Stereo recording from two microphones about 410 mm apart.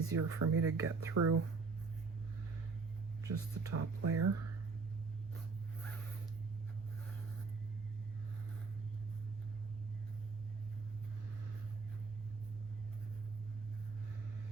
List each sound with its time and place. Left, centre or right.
0.0 s speech: right
3.2 s speech: right